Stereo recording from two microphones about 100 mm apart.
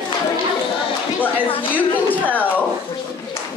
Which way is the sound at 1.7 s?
15° left (ahead or behind).